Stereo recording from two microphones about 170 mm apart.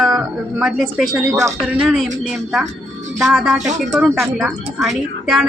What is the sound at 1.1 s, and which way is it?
Speech, 20° right (ahead or behind).